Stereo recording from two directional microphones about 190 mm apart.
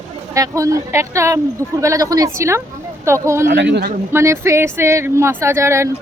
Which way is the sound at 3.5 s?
65° right (ahead or behind).